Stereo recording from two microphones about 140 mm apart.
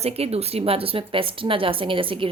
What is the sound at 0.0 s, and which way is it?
A woman's voice, 45° right (ahead or behind).